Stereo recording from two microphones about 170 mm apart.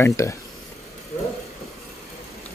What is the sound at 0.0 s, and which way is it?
Speech, 15° left (ahead or behind).